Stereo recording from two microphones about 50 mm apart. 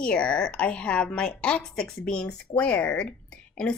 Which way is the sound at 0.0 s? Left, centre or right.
Left.